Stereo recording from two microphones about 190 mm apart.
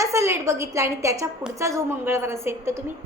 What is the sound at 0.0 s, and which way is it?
A woman's voice, 15° right (ahead or behind).